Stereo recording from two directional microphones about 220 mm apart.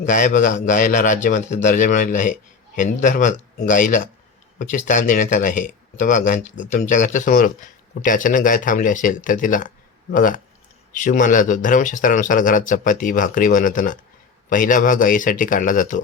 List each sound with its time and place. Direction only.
0.0 s speech: 35° left (ahead or behind)